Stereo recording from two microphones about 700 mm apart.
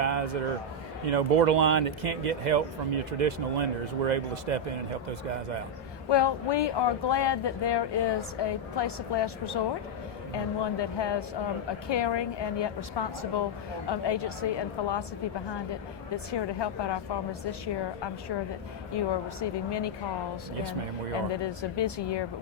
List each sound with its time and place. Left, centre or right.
0.0 s a sound: right
1.0 s speech: right
6.1 s speech: left
16.3 s speech: left
18.9 s speech: left
21.4 s speech: left